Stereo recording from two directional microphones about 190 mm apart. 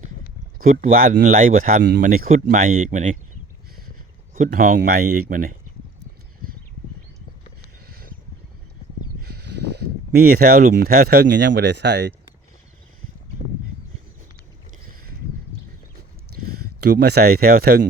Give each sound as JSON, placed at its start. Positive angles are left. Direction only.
{"t": 0.8, "sound": "speech", "side_deg": -45}
{"t": 4.5, "sound": "speech", "side_deg": -45}
{"t": 7.9, "sound": "a sound", "side_deg": -50}
{"t": 9.2, "sound": "speech", "side_deg": -60}
{"t": 16.8, "sound": "speech", "side_deg": -60}